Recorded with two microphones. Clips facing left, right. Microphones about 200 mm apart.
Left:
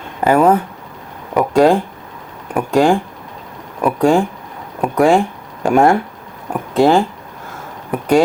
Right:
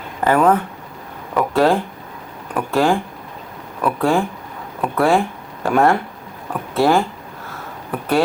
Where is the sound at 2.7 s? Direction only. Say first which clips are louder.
Left 4 dB; 15° left (ahead or behind).